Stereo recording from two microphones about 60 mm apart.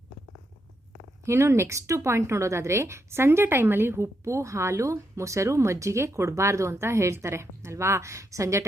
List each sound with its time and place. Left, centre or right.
1.2 s a woman's voice: right